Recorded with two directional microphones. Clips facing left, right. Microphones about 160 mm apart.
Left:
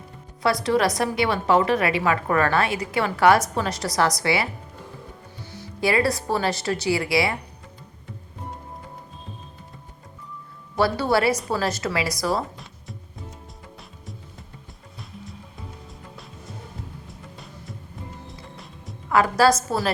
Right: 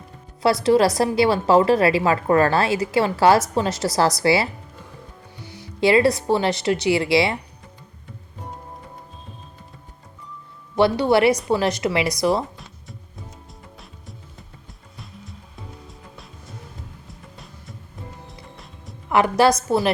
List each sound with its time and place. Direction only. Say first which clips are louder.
0.6 s a woman's voice: right 6 dB; 30° right (ahead or behind)
5.8 s a woman's voice: right 5 dB; 25° right (ahead or behind)
10.8 s a woman's voice: right 4 dB; 20° right (ahead or behind)
15.9 s music: left 1 dB; centre (ahead or behind)
19.0 s a woman's voice: right 1 dB; 20° right (ahead or behind)